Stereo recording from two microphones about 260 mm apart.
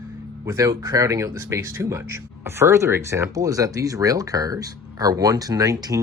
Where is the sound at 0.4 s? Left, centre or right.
Centre.